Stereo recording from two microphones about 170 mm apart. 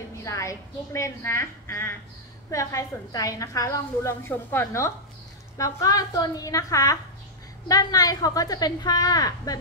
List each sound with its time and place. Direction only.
0.2 s a woman's voice: 15° left (ahead or behind)